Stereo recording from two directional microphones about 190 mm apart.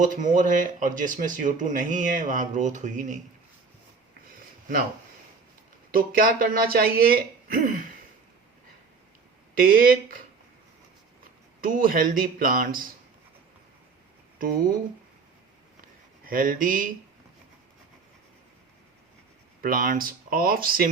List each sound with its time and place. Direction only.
0.0 s speech: 40° right (ahead or behind)
5.9 s speech: 50° right (ahead or behind)
9.6 s speech: 50° right (ahead or behind)
11.6 s speech: 50° right (ahead or behind)
14.3 s speech: 50° right (ahead or behind)
15.8 s a sound: 45° right (ahead or behind)
19.6 s speech: 45° right (ahead or behind)